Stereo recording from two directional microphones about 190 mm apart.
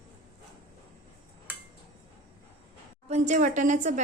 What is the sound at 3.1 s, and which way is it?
Speech, 40° right (ahead or behind).